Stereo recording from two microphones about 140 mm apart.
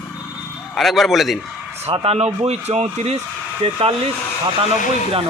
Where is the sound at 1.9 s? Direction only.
45° right (ahead or behind).